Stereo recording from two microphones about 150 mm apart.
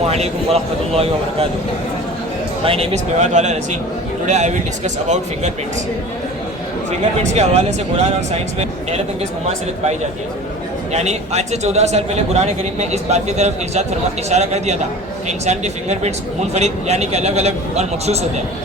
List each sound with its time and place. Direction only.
0.1 s a man's voice: 45° right (ahead or behind)
2.6 s a man's voice: 40° right (ahead or behind)
7.2 s a man's voice: 45° right (ahead or behind)
10.9 s a man's voice: 50° right (ahead or behind)